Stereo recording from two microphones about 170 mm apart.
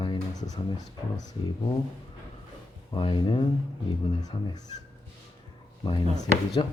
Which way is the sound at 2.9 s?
30° left (ahead or behind).